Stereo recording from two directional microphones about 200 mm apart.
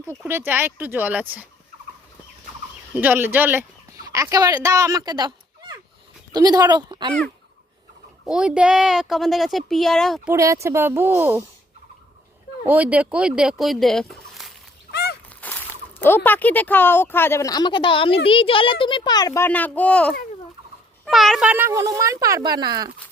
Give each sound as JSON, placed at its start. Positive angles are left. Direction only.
{"t": 0.3, "sound": "a child's voice", "side_deg": -10}
{"t": 2.9, "sound": "speech", "side_deg": -10}
{"t": 8.3, "sound": "speech", "side_deg": -5}
{"t": 10.3, "sound": "a child's voice", "side_deg": -15}
{"t": 12.6, "sound": "a child's voice", "side_deg": -5}